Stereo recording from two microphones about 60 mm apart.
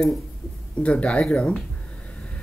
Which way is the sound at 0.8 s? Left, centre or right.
Centre.